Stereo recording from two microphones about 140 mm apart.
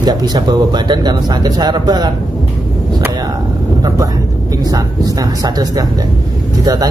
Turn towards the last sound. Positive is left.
turn(degrees=-30)  # may be behind; listen again after turning